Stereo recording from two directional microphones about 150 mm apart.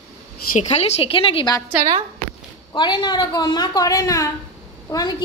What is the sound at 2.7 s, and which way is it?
A woman's voice, 30° left (ahead or behind).